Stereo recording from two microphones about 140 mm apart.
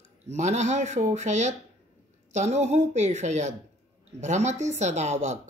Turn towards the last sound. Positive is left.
turn(degrees=-55)  # may be behind; listen again after turning